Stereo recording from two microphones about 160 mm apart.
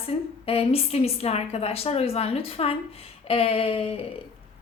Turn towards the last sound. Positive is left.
turn(degrees=35)  # may be behind; listen again after turning